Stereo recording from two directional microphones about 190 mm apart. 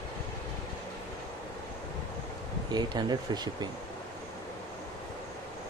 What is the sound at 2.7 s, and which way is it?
Speech, 20° right (ahead or behind).